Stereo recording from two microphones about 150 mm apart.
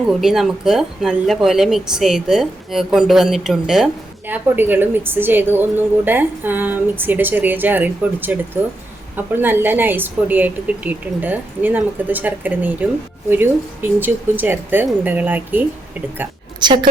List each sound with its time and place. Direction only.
0.2 s speech: centre (ahead or behind)
4.3 s a woman's voice: 15° right (ahead or behind)
16.6 s a woman's voice: 30° right (ahead or behind)